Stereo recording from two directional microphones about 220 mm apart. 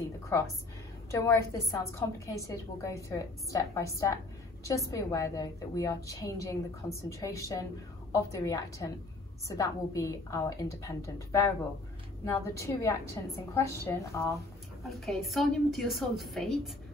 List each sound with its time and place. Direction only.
1.1 s a woman's voice: 15° left (ahead or behind)
14.8 s a woman's voice: centre (ahead or behind)